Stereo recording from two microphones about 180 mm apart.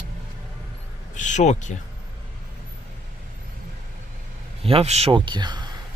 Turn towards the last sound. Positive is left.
turn(degrees=-25)  # may be behind; listen again after turning